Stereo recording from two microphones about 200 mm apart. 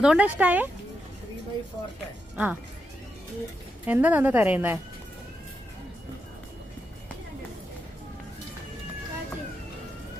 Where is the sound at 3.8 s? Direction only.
10° right (ahead or behind).